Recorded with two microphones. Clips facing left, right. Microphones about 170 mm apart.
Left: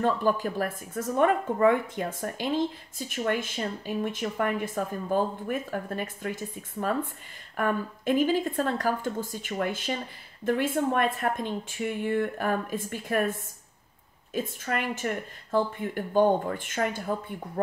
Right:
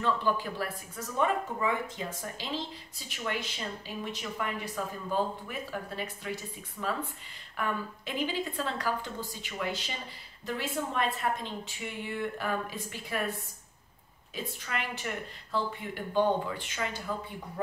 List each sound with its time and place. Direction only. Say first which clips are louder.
0.0 s speech: left 5 dB; 45° left (ahead or behind)